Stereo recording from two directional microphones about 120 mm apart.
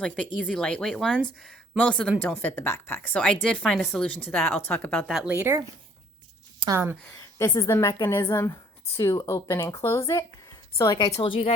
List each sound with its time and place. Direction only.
0.3 s speech: 10° left (ahead or behind)
5.2 s speech: 15° right (ahead or behind)
6.7 s speech: 20° right (ahead or behind)
7.1 s a woman's voice: 30° left (ahead or behind)